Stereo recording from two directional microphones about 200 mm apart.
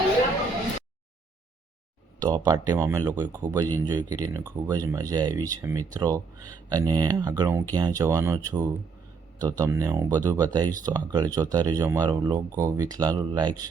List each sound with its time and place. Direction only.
2.2 s speech: 20° right (ahead or behind)